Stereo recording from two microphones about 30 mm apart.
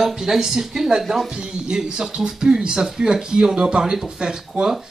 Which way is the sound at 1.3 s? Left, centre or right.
Right.